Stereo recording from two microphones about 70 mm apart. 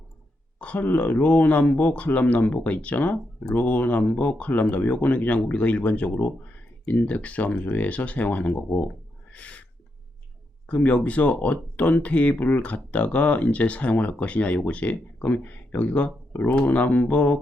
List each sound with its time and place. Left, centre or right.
0.6 s speech: left
9.3 s owl: centre
10.7 s speech: left